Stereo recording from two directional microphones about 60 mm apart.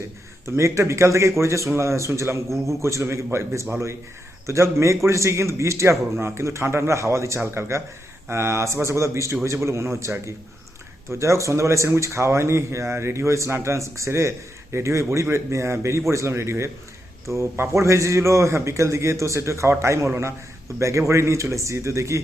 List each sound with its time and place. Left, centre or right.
0.4 s speech: right